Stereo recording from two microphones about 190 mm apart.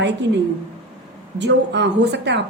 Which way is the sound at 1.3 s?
65° right (ahead or behind).